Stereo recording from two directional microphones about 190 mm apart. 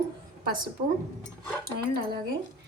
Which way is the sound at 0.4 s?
50° right (ahead or behind).